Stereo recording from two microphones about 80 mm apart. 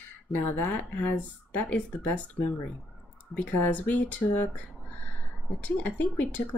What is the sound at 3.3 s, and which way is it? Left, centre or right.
Speech, centre.